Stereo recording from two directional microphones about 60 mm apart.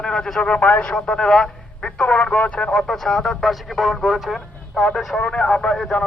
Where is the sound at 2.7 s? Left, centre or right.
Centre.